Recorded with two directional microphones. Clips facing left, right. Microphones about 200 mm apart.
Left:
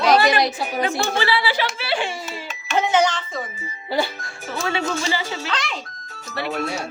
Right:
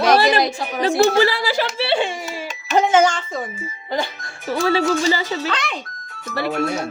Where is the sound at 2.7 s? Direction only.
45° right (ahead or behind).